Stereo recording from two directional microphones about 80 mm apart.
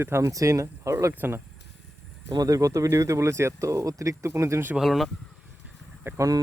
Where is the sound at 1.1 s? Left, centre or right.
Right.